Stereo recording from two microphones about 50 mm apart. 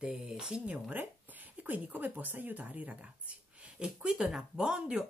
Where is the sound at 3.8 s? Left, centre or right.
Centre.